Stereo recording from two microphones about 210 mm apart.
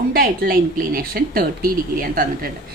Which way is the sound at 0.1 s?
45° right (ahead or behind).